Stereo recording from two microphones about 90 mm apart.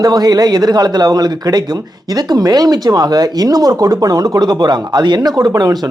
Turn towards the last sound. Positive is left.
turn(degrees=-50)  # may be behind; listen again after turning